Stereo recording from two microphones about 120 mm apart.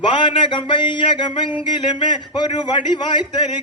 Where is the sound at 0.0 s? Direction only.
45° left (ahead or behind).